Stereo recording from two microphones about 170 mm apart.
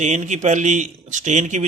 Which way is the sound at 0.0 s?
45° right (ahead or behind).